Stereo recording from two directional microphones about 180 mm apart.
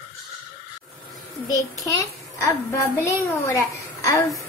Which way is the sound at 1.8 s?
15° left (ahead or behind).